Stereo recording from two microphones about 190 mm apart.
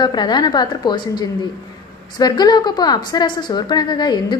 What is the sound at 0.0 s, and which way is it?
A woman's voice, 20° left (ahead or behind).